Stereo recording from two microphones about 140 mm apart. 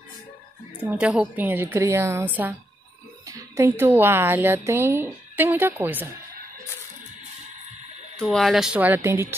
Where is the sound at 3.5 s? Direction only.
15° right (ahead or behind).